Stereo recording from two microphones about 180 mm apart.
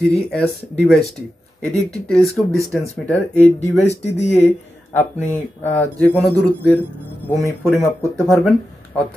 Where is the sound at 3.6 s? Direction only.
40° left (ahead or behind).